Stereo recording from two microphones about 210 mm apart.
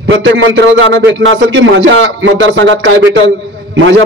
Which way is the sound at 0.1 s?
60° right (ahead or behind).